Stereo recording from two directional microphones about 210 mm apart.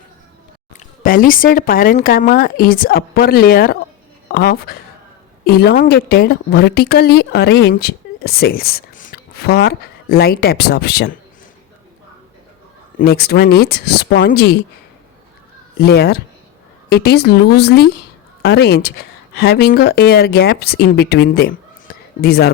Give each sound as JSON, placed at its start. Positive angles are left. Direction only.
{"t": 0.7, "sound": "a woman's voice", "side_deg": 40}
{"t": 13.0, "sound": "a woman's voice", "side_deg": 50}
{"t": 15.8, "sound": "a woman's voice", "side_deg": 50}